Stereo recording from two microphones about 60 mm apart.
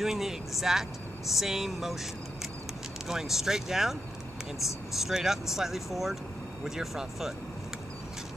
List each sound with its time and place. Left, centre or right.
0.0 s speech: centre
3.1 s speech: centre